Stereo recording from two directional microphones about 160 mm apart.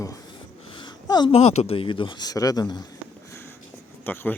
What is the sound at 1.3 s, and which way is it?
A man's voice, 40° left (ahead or behind).